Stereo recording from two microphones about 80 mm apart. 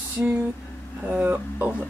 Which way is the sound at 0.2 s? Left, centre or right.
Centre.